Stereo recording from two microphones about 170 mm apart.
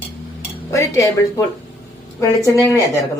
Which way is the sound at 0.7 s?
20° left (ahead or behind).